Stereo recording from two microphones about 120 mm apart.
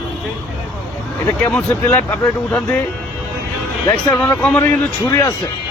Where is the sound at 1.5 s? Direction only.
15° left (ahead or behind).